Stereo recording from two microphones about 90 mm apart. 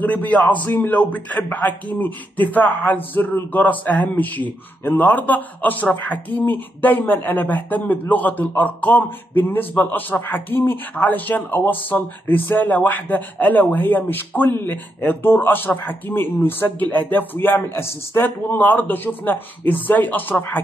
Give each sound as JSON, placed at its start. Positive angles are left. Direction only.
{"t": 0.0, "sound": "speech", "side_deg": 15}